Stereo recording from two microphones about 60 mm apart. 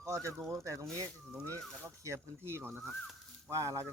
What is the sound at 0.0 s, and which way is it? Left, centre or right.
Speech, right.